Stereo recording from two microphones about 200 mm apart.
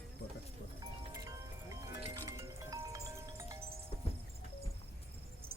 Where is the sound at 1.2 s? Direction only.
15° right (ahead or behind).